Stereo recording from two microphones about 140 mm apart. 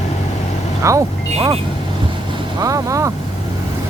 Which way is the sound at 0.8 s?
20° right (ahead or behind).